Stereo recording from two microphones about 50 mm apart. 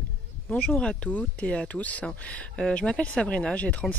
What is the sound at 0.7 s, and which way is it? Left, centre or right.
Speech, left.